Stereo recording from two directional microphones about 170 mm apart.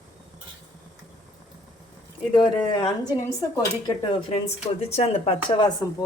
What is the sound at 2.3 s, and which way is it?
Speech, 25° left (ahead or behind).